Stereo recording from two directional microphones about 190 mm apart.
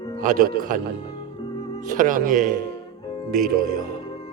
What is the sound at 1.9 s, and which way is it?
Speech, 45° right (ahead or behind).